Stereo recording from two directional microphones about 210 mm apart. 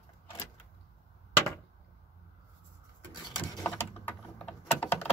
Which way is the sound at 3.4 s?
15° left (ahead or behind).